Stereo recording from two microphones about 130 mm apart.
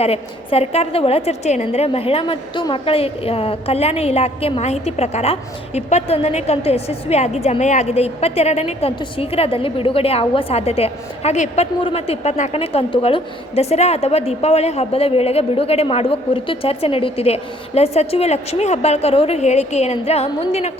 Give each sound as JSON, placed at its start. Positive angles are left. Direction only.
{"t": 0.0, "sound": "a woman's voice", "side_deg": 50}
{"t": 11.8, "sound": "a woman's voice", "side_deg": 45}